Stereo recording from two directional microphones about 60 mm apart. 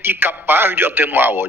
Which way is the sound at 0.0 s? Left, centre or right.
Right.